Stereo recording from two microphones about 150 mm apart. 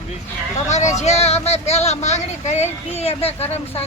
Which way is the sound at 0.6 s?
50° left (ahead or behind).